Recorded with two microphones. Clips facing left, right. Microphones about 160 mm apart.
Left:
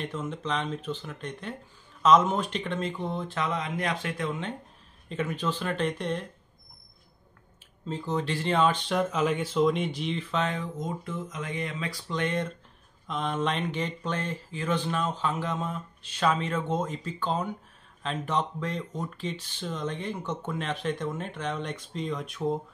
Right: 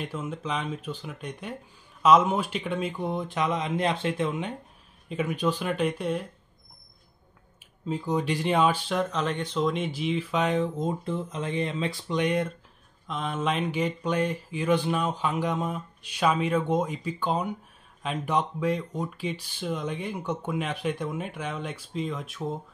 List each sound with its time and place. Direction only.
0.0 s speech: 10° right (ahead or behind); by 4.3 s 25° right (ahead or behind)
4.3 s speech: 15° right (ahead or behind)
7.9 s speech: 10° right (ahead or behind)
10.6 s speech: 30° right (ahead or behind); by 12.4 s 15° right (ahead or behind)
13.0 s speech: centre (ahead or behind)